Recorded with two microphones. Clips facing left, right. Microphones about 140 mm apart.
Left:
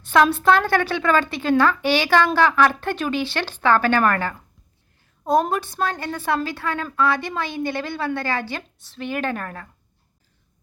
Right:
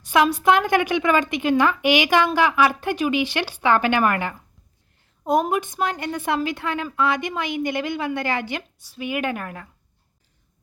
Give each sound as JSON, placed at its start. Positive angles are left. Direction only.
{"t": 0.0, "sound": "a woman's voice", "side_deg": -15}